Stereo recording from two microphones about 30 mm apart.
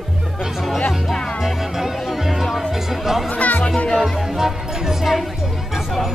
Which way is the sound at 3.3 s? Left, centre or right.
Left.